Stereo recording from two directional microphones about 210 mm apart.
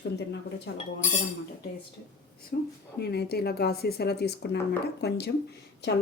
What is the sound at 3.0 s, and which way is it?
Speech, 50° left (ahead or behind).